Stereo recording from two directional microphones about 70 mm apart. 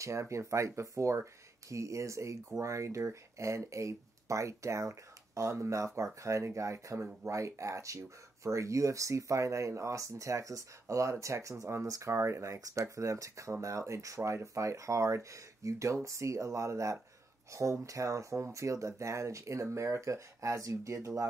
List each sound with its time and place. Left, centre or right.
0.0 s speech: right